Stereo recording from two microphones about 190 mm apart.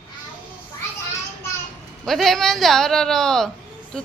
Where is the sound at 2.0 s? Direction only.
Centre (ahead or behind).